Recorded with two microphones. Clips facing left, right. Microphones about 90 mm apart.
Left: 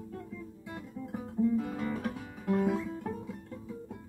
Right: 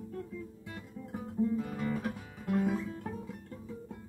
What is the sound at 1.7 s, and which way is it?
Music, 25° left (ahead or behind).